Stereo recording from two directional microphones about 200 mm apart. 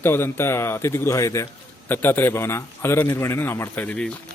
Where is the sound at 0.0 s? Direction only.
10° left (ahead or behind).